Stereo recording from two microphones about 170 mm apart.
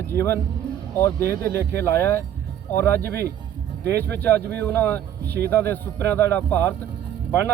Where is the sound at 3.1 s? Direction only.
70° right (ahead or behind).